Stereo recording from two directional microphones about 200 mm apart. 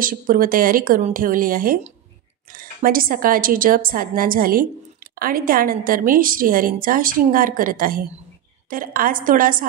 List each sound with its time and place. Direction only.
0.0 s a woman's voice: 45° right (ahead or behind)